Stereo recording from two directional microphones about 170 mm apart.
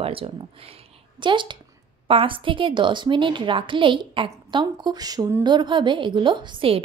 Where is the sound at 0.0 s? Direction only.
35° right (ahead or behind).